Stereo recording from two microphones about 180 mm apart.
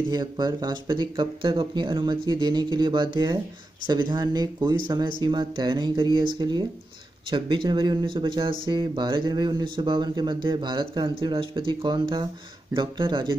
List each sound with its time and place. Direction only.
0.1 s speech: 25° right (ahead or behind)